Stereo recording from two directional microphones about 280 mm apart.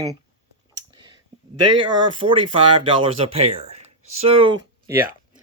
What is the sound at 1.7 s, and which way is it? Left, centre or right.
Speech, centre.